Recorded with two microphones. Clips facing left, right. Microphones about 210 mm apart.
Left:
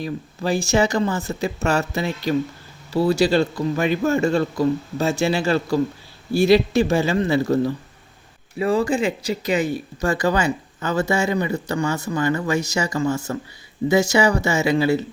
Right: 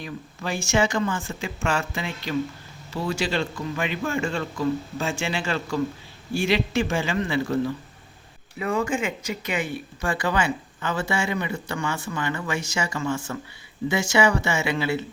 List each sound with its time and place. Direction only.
0.0 s speech: 35° left (ahead or behind)